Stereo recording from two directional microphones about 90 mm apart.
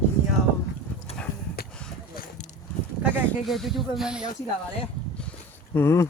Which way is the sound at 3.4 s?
Centre (ahead or behind).